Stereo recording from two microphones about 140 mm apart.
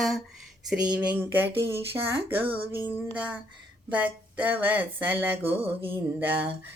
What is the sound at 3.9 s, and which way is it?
Speech, 10° right (ahead or behind).